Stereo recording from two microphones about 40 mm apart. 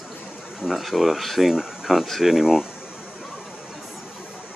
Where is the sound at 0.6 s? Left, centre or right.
Centre.